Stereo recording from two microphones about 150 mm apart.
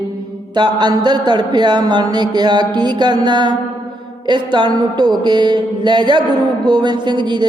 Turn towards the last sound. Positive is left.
turn(degrees=-30)  # may be behind; listen again after turning